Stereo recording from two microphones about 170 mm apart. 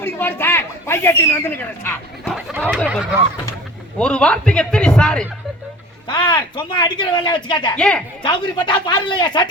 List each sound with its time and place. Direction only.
0.0 s speech: 15° left (ahead or behind)
2.6 s a man's voice: 5° right (ahead or behind)
3.9 s a man's voice: 5° left (ahead or behind)
6.1 s speech: 25° left (ahead or behind)
7.8 s a man's voice: 5° left (ahead or behind)
8.2 s speech: 25° left (ahead or behind)